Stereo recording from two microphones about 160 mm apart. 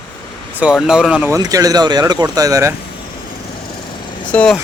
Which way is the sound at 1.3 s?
20° right (ahead or behind).